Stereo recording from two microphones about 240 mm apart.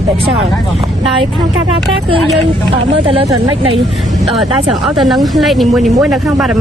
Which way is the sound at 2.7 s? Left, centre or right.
Right.